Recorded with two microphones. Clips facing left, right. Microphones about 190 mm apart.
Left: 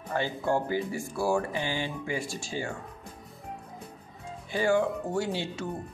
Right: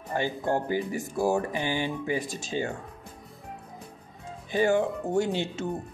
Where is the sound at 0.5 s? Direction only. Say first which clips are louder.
Even; 20° right (ahead or behind).